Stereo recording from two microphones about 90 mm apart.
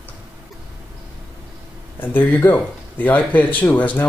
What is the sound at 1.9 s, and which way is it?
Speech, 20° left (ahead or behind).